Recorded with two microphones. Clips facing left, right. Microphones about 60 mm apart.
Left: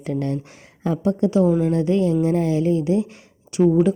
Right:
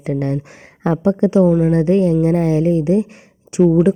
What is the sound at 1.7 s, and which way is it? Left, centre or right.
A woman's voice, right.